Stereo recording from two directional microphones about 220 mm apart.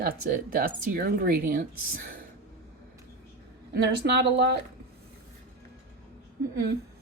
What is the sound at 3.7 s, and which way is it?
Speech, 50° right (ahead or behind).